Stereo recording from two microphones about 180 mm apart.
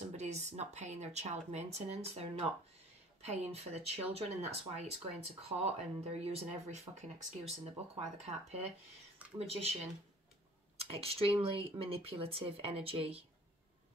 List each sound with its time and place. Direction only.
0.1 s speech: 40° right (ahead or behind)
9.6 s speech: 35° right (ahead or behind)